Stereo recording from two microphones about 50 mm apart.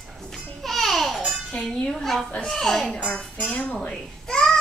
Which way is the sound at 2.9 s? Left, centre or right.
Centre.